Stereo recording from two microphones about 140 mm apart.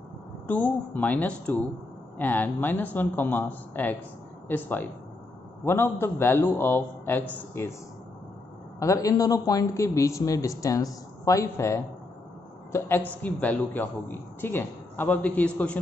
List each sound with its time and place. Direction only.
0.5 s a man's voice: 10° left (ahead or behind)
8.7 s a man's voice: 20° left (ahead or behind)